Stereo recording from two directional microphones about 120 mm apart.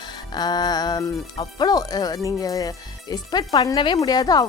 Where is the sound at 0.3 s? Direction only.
35° left (ahead or behind).